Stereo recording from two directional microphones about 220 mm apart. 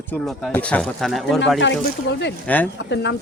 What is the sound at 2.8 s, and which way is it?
Speech, 50° left (ahead or behind).